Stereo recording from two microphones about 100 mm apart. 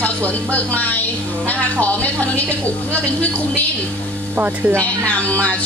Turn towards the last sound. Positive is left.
turn(degrees=15)  # may be behind; listen again after turning